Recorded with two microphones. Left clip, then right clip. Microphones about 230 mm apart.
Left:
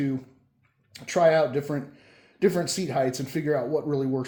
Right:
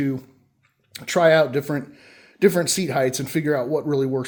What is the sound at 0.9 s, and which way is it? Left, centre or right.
Speech, right.